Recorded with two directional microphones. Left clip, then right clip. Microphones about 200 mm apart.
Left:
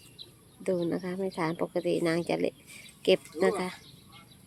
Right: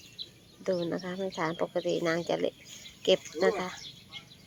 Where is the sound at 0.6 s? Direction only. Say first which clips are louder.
Left 1 dB; 15° left (ahead or behind).